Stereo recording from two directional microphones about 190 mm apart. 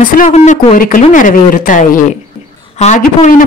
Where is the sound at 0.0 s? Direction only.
45° left (ahead or behind).